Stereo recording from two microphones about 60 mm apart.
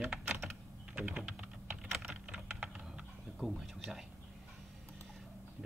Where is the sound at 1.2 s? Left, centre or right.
Centre.